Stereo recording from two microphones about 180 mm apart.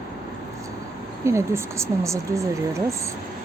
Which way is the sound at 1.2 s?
15° right (ahead or behind).